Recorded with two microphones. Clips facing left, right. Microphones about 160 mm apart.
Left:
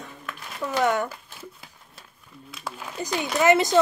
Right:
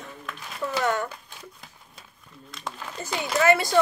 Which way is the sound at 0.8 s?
10° left (ahead or behind).